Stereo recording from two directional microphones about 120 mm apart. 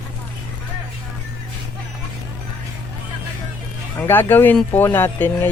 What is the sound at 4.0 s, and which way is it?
Speech, 15° left (ahead or behind).